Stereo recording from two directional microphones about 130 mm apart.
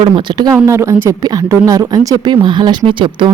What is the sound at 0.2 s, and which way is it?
Speech, 35° right (ahead or behind).